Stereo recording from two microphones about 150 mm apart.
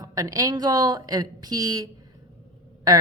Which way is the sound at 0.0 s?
25° right (ahead or behind).